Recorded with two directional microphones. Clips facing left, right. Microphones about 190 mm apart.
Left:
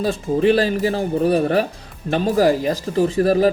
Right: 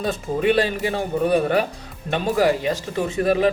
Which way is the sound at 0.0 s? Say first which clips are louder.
Left 4 dB; 35° left (ahead or behind).